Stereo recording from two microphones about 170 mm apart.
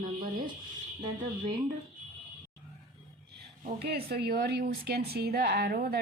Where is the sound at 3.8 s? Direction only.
65° right (ahead or behind).